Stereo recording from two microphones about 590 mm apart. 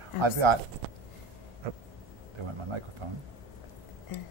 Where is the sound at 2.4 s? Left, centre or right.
Right.